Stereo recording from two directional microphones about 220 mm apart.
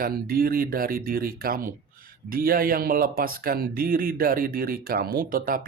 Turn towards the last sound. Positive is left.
turn(degrees=-40)  # may be behind; listen again after turning